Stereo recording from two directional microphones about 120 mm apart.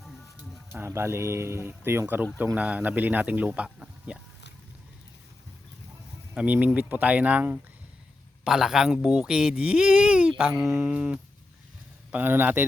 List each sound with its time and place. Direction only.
0.7 s speech: 20° right (ahead or behind)
6.3 s speech: 10° right (ahead or behind)